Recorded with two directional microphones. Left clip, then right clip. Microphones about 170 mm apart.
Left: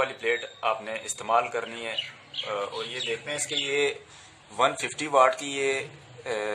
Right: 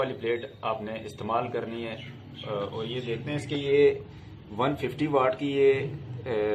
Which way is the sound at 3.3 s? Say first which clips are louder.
Right 4 dB; 80° left.